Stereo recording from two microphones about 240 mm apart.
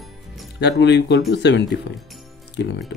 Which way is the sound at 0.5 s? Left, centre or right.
Left.